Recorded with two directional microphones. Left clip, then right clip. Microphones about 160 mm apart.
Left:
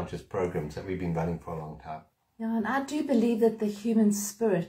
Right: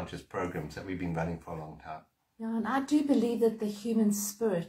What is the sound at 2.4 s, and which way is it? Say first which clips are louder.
Speech: left 2 dB; 20° left (ahead or behind).